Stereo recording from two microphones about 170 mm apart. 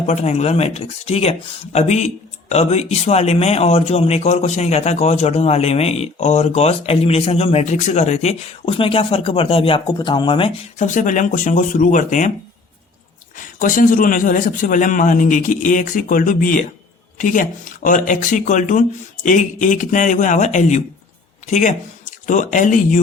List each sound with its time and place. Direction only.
0.0 s speech: 40° left (ahead or behind)
10.8 s speech: 50° left (ahead or behind)
13.3 s speech: 50° left (ahead or behind)